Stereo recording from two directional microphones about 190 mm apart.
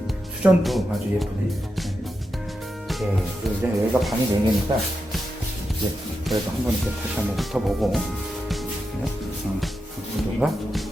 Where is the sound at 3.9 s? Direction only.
20° right (ahead or behind).